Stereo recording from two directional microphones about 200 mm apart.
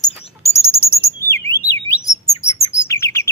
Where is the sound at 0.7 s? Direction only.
10° left (ahead or behind).